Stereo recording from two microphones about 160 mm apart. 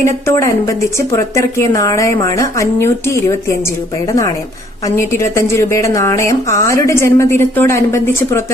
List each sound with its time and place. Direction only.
0.0 s a woman's voice: 20° left (ahead or behind)
4.9 s a woman's voice: 15° left (ahead or behind)